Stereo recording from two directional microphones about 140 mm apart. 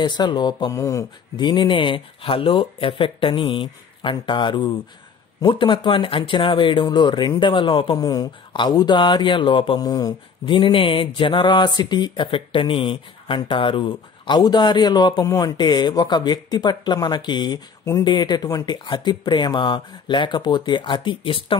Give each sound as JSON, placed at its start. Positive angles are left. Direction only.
{"t": 0.0, "sound": "speech", "side_deg": 30}